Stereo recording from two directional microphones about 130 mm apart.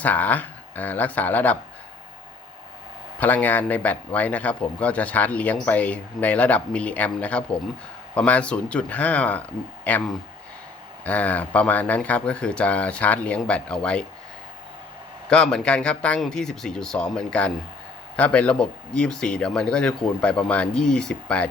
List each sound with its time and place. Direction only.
0.0 s a man's voice: 15° left (ahead or behind)
3.2 s a man's voice: 15° left (ahead or behind)
11.0 s a man's voice: 10° left (ahead or behind)
15.3 s a man's voice: 5° left (ahead or behind)